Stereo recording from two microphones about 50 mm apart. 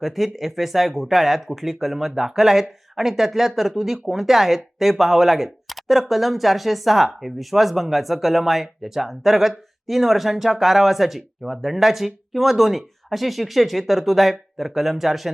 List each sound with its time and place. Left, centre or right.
0.0 s speech: centre